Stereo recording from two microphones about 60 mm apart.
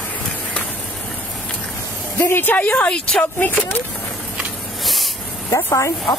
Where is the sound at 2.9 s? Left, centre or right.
Centre.